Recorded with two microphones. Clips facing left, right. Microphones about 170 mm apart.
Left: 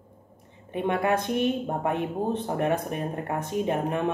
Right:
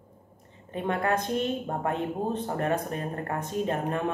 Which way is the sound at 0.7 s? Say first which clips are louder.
Left 3 dB; 15° left (ahead or behind).